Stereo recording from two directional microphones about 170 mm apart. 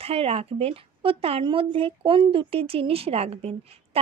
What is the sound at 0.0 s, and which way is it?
A woman's voice, 35° right (ahead or behind).